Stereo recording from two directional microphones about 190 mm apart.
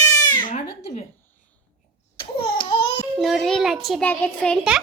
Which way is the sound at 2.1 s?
25° left (ahead or behind).